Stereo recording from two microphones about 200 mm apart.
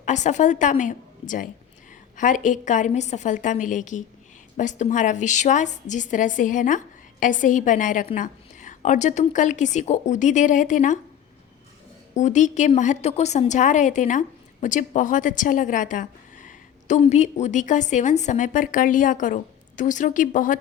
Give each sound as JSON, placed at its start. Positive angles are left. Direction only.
{"t": 0.0, "sound": "a woman's voice", "side_deg": 35}
{"t": 12.1, "sound": "a woman's voice", "side_deg": 35}